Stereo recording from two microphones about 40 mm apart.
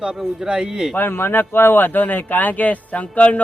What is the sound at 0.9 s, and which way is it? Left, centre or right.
Speech, left.